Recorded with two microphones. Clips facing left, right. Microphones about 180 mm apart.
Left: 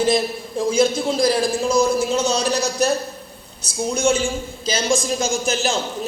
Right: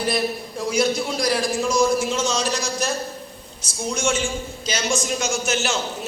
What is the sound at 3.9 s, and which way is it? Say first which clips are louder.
A man's voice: left 4 dB; 35° left (ahead or behind).